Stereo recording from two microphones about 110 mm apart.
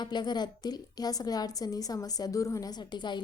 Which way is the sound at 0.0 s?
40° left (ahead or behind).